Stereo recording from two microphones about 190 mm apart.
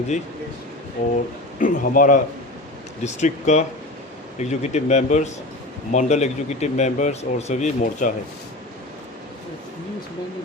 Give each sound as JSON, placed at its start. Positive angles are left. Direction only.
{"t": 1.1, "sound": "speech", "side_deg": 45}